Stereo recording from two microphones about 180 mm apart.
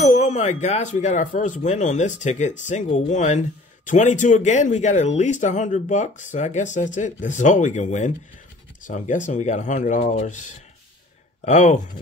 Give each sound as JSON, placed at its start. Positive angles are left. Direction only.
{"t": 0.1, "sound": "speech", "side_deg": 40}